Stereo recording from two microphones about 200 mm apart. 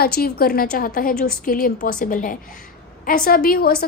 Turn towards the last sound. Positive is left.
turn(degrees=50)  # may be behind; listen again after turning